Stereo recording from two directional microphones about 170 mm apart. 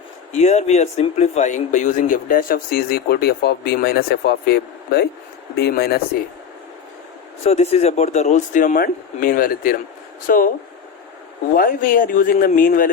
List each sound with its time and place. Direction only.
0.3 s speech: 40° left (ahead or behind); by 6.0 s 70° left (ahead or behind)
7.4 s a man's voice: 40° left (ahead or behind)
11.5 s speech: 55° left (ahead or behind)